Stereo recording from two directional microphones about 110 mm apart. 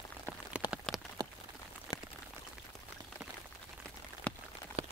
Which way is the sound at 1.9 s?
35° left (ahead or behind).